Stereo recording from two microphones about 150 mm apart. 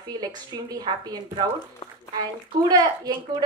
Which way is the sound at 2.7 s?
25° right (ahead or behind).